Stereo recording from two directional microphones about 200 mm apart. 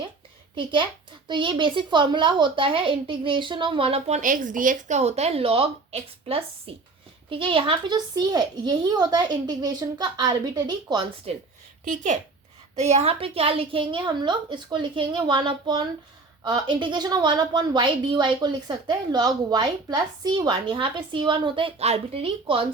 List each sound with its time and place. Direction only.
0.5 s a woman's voice: 25° right (ahead or behind)
12.7 s a woman's voice: 35° right (ahead or behind)